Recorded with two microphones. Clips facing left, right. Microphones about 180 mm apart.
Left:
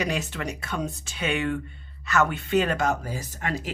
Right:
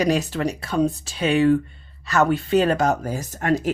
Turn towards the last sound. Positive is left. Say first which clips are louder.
# right 9 dB
turn(degrees=-45)  # may be behind; listen again after turning